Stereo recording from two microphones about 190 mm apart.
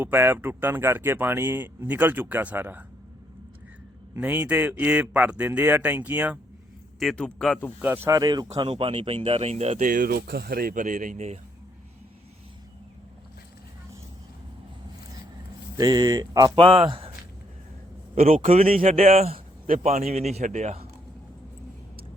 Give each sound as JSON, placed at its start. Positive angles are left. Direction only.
{"t": 0.0, "sound": "speech", "side_deg": -10}
{"t": 4.1, "sound": "speech", "side_deg": -10}
{"t": 7.0, "sound": "a man's voice", "side_deg": 5}
{"t": 7.8, "sound": "speech", "side_deg": -10}
{"t": 15.8, "sound": "speech", "side_deg": -20}
{"t": 18.1, "sound": "speech", "side_deg": -35}